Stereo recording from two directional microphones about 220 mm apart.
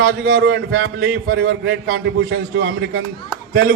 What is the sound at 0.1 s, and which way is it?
A man's voice, 45° right (ahead or behind).